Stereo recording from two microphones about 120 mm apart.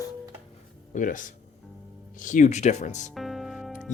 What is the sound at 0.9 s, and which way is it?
Speech, 90° left.